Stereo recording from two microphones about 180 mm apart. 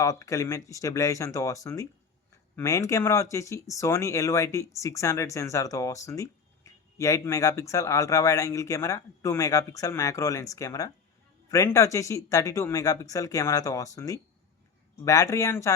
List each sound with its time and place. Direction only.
0.0 s speech: 20° left (ahead or behind)